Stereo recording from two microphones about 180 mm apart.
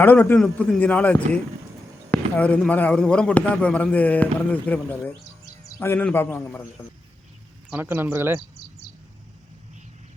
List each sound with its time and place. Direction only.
0.0 s a man's voice: 10° left (ahead or behind)
7.7 s speech: 10° right (ahead or behind)